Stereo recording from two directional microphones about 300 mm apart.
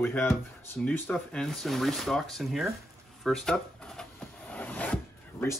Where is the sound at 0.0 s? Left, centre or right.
Centre.